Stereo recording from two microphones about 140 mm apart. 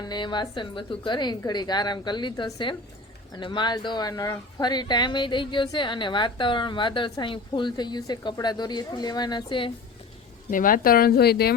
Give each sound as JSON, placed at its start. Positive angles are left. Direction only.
{"t": 0.0, "sound": "speech", "side_deg": 30}
{"t": 10.5, "sound": "speech", "side_deg": 80}